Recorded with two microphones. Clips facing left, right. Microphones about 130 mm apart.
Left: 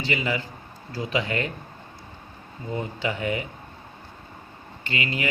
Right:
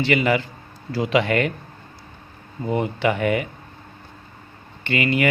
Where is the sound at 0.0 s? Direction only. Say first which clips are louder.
Right 7 dB; 70° right (ahead or behind).